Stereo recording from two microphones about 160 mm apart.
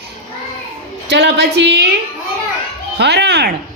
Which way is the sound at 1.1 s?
90° right.